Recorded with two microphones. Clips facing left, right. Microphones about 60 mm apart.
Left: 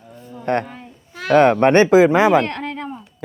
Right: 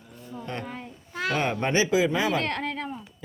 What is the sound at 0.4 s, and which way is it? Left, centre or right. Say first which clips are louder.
Speech: left 15 dB; left.